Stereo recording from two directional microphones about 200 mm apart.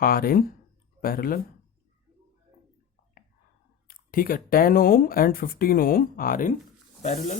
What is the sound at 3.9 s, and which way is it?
Speech, 45° left (ahead or behind).